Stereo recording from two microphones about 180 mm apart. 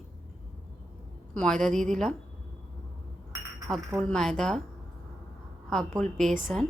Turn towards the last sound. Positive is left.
turn(degrees=5)  # may be behind; listen again after turning